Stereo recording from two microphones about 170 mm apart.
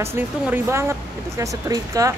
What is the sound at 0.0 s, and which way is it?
A woman's voice, 15° right (ahead or behind).